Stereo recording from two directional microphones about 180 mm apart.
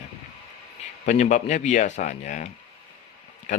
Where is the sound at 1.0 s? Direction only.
40° left (ahead or behind).